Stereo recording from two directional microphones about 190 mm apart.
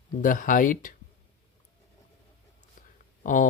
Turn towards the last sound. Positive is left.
turn(degrees=45)  # may be behind; listen again after turning